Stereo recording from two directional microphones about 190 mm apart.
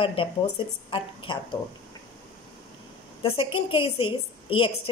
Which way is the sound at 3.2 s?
25° left (ahead or behind).